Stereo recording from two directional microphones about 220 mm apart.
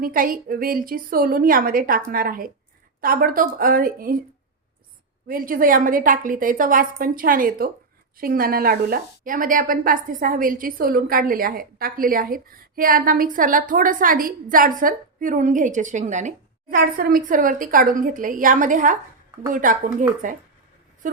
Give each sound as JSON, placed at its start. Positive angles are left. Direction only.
{"t": 0.0, "sound": "a woman's voice", "side_deg": -40}
{"t": 5.3, "sound": "a woman's voice", "side_deg": -40}